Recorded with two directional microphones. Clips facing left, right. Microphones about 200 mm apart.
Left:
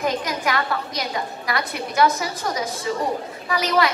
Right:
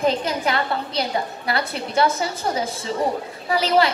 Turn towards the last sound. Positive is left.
turn(degrees=-30)  # may be behind; listen again after turning